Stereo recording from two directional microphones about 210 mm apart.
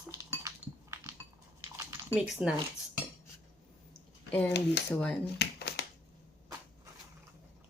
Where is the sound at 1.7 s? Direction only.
15° right (ahead or behind).